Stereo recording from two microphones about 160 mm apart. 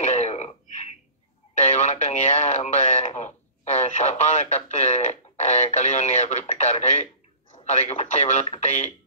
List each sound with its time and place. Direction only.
0.0 s throat clearing: 45° left (ahead or behind)
1.6 s speech: 45° left (ahead or behind)